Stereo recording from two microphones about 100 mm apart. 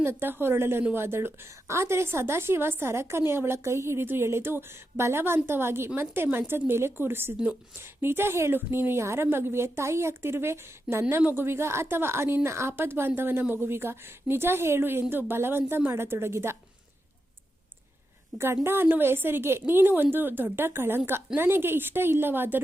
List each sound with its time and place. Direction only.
0.0 s a woman's voice: 25° right (ahead or behind)
18.3 s a woman's voice: 25° right (ahead or behind)